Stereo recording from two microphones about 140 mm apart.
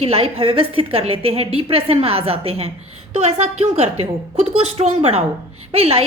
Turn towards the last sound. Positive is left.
turn(degrees=-45)  # may be behind; listen again after turning